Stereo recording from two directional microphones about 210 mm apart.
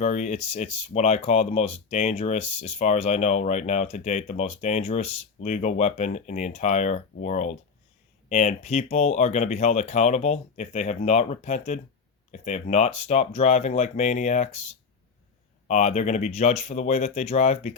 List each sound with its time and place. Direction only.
0.0 s speech: 35° left (ahead or behind)
15.6 s speech: 35° left (ahead or behind)